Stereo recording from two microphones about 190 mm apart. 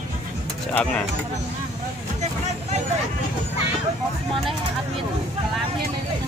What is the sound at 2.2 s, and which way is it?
Vehicle, 35° right (ahead or behind).